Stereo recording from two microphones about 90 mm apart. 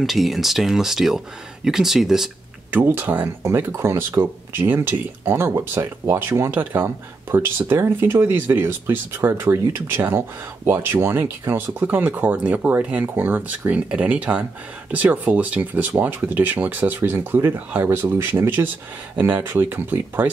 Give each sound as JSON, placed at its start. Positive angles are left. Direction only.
{"t": 0.0, "sound": "speech", "side_deg": 0}
{"t": 2.7, "sound": "speech", "side_deg": -25}